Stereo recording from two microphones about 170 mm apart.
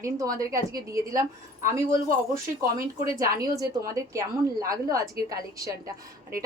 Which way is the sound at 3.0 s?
20° right (ahead or behind).